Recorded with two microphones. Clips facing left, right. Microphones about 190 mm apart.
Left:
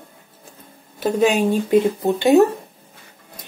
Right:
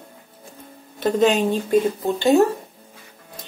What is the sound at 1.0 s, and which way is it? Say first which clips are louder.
Speech: even; 10° left (ahead or behind).